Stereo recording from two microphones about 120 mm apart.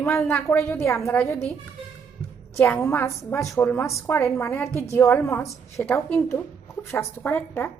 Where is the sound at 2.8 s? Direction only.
25° left (ahead or behind).